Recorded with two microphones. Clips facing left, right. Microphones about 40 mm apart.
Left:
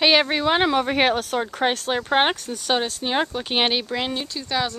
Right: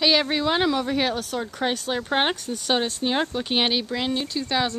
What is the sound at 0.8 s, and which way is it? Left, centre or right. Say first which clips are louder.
Speech: left 4 dB; left.